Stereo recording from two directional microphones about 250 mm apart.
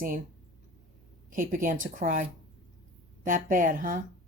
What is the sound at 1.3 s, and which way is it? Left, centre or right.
Speech, right.